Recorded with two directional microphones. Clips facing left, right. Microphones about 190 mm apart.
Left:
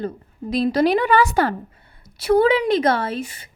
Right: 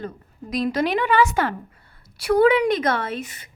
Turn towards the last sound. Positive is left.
turn(degrees=30)  # may be behind; listen again after turning